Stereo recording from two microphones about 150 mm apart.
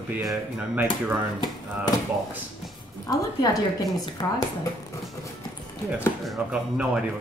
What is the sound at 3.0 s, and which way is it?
Speech, 25° left (ahead or behind).